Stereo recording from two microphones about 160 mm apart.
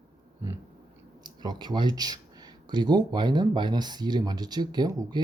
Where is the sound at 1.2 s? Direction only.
25° right (ahead or behind).